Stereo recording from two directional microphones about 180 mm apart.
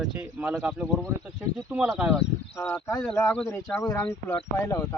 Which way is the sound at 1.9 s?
5° right (ahead or behind).